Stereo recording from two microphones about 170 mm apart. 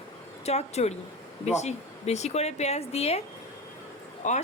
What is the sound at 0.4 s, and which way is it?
A man's voice, 40° left (ahead or behind).